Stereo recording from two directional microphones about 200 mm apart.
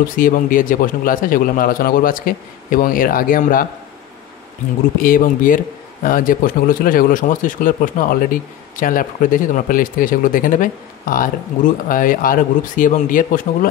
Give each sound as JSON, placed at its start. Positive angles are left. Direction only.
{"t": 0.1, "sound": "speech", "side_deg": 45}
{"t": 5.0, "sound": "speech", "side_deg": 45}